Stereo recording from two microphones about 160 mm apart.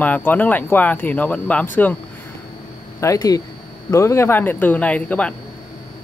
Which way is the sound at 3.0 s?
20° left (ahead or behind).